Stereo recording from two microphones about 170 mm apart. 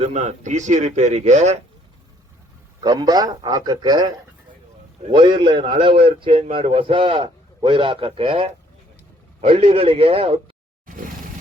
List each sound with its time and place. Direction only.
0.0 s speech: 40° right (ahead or behind)
2.8 s a man's voice: 25° right (ahead or behind)